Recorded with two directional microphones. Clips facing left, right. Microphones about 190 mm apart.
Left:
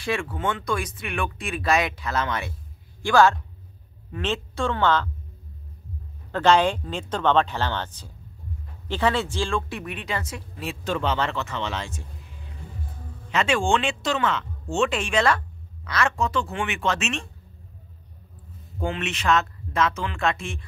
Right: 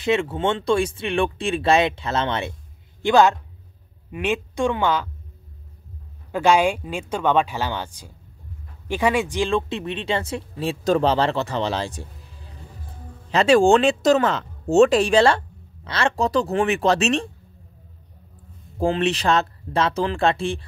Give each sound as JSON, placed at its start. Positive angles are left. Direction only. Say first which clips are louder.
{"t": 0.0, "sound": "a man's voice", "louder": "right 6 dB", "side_deg": -20}
{"t": 6.3, "sound": "speech", "louder": "right 1 dB", "side_deg": -10}
{"t": 18.8, "sound": "speech", "louder": "right 8 dB", "side_deg": -35}